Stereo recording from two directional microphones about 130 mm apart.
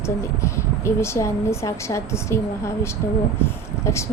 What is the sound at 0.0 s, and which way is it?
Speech, 20° left (ahead or behind).